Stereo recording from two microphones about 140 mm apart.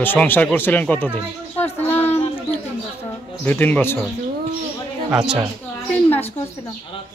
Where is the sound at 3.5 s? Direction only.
15° left (ahead or behind).